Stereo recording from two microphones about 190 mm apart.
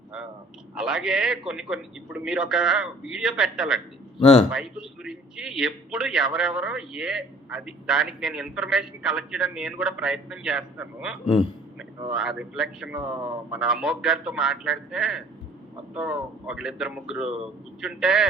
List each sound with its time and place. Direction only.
0.8 s a man's voice: 5° right (ahead or behind)
4.2 s speech: 30° left (ahead or behind)
4.5 s a man's voice: 5° right (ahead or behind)